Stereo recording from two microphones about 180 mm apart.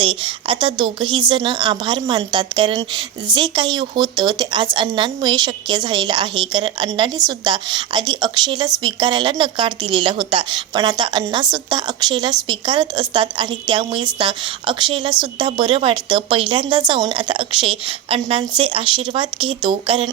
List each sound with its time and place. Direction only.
0.0 s a woman's voice: 30° right (ahead or behind)